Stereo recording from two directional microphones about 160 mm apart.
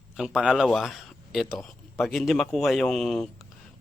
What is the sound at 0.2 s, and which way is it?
Speech, 5° right (ahead or behind).